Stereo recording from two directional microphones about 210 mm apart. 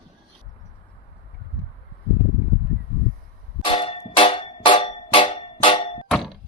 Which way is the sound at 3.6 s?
25° left (ahead or behind).